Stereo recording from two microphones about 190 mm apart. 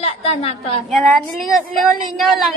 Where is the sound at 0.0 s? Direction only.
30° left (ahead or behind).